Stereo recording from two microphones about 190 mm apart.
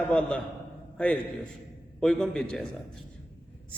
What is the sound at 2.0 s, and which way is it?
Speech, centre (ahead or behind).